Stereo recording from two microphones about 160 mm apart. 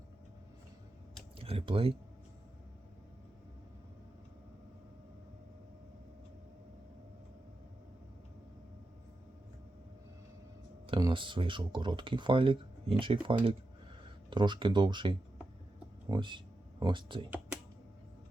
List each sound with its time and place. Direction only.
1.4 s speech: 35° right (ahead or behind)
10.8 s speech: 30° right (ahead or behind)